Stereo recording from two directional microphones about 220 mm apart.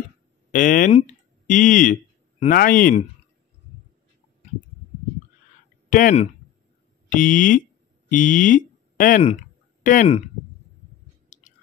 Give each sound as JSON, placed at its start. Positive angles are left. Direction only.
{"t": 0.5, "sound": "speech", "side_deg": 35}
{"t": 5.9, "sound": "speech", "side_deg": 35}
{"t": 11.3, "sound": "chewing", "side_deg": 35}